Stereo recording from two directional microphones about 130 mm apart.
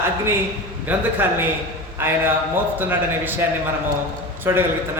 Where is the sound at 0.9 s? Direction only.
15° right (ahead or behind).